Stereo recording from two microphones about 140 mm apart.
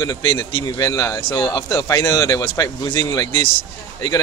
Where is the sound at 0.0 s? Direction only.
25° left (ahead or behind).